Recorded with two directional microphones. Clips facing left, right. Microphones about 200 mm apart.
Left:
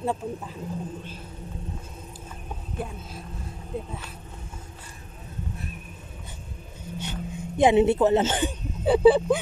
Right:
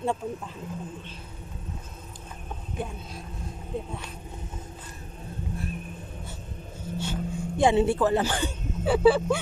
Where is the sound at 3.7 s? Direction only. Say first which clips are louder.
Even; centre (ahead or behind).